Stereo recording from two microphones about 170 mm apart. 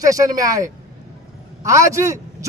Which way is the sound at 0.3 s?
20° right (ahead or behind).